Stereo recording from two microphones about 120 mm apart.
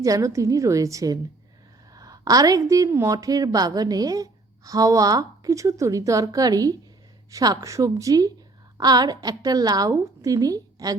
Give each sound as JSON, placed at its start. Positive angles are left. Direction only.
{"t": 0.0, "sound": "a woman's voice", "side_deg": -25}